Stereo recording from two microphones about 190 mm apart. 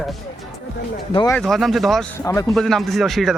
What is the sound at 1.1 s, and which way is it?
Speech, 25° left (ahead or behind).